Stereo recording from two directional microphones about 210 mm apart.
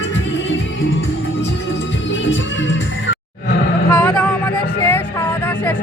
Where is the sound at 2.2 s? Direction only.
60° left (ahead or behind).